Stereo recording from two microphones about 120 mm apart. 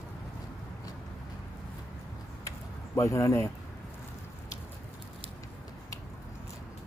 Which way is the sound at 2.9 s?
25° left (ahead or behind).